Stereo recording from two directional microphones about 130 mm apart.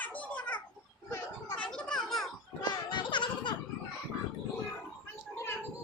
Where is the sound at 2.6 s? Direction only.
35° left (ahead or behind).